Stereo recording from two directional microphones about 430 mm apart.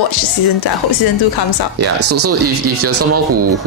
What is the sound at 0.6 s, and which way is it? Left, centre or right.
Speech, left.